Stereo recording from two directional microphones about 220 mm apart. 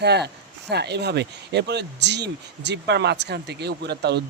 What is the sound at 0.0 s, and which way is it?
A man's voice, 50° right (ahead or behind).